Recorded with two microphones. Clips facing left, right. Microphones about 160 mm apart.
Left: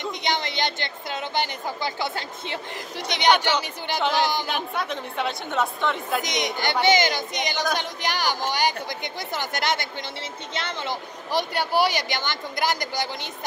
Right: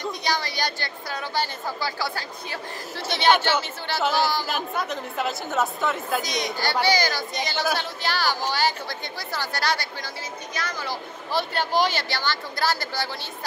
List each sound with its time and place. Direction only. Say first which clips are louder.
0.0 s speech: even; 20° left (ahead or behind)
4.0 s a woman's voice: even; 5° right (ahead or behind)
6.2 s speech: left 1 dB; 20° left (ahead or behind)